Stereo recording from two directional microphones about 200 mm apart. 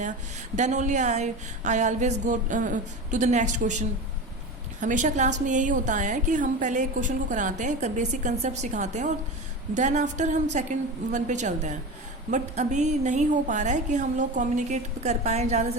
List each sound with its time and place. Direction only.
0.5 s a woman's voice: 35° right (ahead or behind)